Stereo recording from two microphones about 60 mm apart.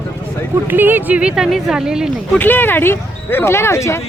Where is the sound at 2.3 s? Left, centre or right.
Left.